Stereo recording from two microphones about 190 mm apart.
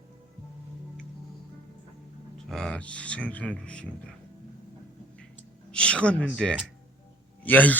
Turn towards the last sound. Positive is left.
turn(degrees=10)  # may be behind; listen again after turning